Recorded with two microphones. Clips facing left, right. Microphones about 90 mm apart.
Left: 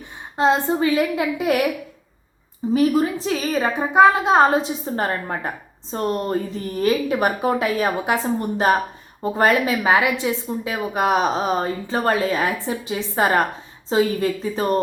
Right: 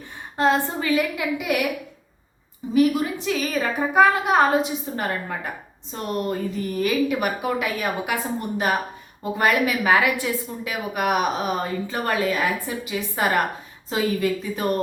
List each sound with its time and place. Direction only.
0.3 s a woman's voice: 20° left (ahead or behind)
2.7 s a woman's voice: 35° left (ahead or behind)